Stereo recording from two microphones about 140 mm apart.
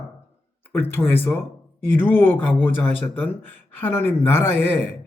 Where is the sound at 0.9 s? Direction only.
15° left (ahead or behind).